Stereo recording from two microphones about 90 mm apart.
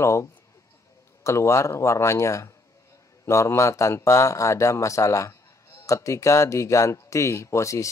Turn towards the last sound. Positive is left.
turn(degrees=35)  # may be behind; listen again after turning